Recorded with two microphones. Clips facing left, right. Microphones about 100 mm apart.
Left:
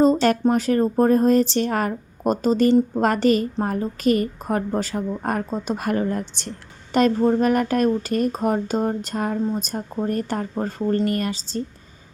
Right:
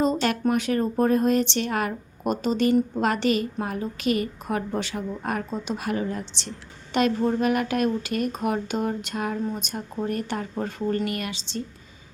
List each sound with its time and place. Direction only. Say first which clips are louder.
0.0 s a woman's voice: left 6 dB; 40° left (ahead or behind)
6.9 s speech: left 5 dB; 35° left (ahead or behind)